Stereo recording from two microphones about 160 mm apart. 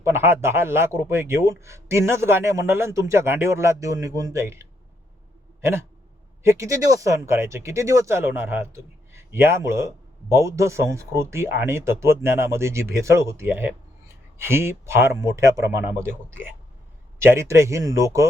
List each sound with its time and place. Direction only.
0.0 s speech: 15° right (ahead or behind)
6.4 s speech: 15° right (ahead or behind)